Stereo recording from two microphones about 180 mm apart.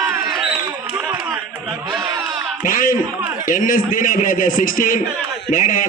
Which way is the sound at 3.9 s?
50° left (ahead or behind).